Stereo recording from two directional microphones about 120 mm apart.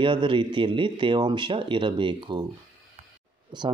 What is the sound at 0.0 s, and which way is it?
Speech, 45° right (ahead or behind).